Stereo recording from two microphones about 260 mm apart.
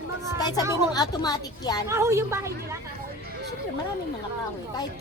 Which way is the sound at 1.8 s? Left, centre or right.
Centre.